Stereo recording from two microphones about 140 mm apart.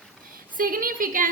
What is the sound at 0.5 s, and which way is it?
Speech, 90° right.